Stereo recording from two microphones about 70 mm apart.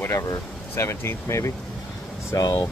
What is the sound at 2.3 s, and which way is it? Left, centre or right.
Speech, left.